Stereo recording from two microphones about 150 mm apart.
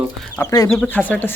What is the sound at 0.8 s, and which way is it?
Speech, 10° left (ahead or behind).